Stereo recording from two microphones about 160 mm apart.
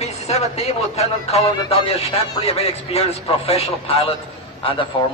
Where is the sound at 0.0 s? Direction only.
40° left (ahead or behind).